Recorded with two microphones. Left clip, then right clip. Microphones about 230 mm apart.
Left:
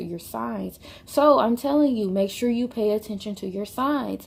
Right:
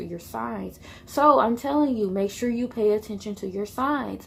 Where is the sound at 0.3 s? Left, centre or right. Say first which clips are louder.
Even; left.